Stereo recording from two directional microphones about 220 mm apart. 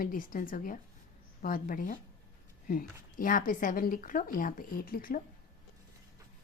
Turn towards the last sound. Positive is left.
turn(degrees=40)  # may be behind; listen again after turning